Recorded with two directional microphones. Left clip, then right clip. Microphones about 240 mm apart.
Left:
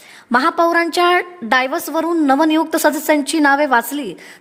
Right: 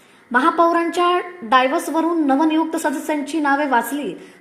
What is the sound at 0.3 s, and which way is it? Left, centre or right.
A woman's voice, left.